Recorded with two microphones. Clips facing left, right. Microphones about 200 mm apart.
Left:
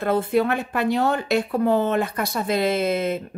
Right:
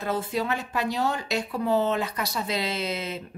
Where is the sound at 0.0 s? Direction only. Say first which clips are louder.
Left 8 dB; 55° left (ahead or behind).